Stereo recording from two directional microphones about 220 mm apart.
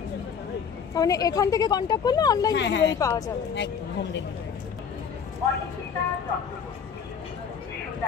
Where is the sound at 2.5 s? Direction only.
55° left (ahead or behind).